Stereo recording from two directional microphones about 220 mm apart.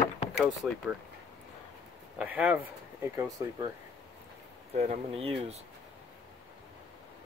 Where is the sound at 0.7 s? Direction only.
5° left (ahead or behind).